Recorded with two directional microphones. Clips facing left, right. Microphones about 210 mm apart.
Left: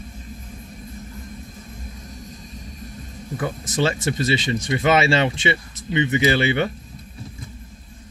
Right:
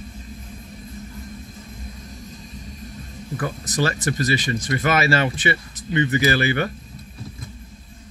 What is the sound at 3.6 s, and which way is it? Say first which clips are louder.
Speech: left 1 dB; 25° left (ahead or behind).